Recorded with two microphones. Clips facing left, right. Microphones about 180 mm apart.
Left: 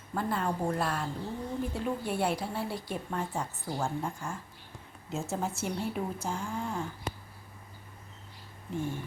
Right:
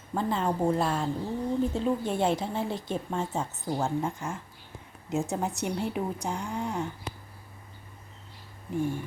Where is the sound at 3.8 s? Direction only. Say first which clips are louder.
Right 4 dB; centre (ahead or behind).